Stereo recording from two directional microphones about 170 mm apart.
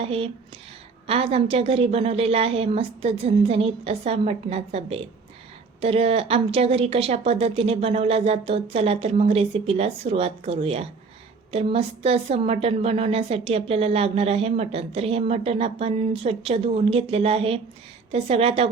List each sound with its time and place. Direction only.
0.0 s a woman's voice: 35° right (ahead or behind)